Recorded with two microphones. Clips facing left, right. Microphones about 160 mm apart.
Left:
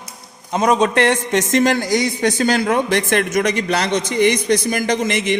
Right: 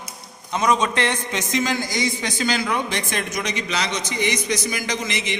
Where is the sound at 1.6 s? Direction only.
70° left (ahead or behind).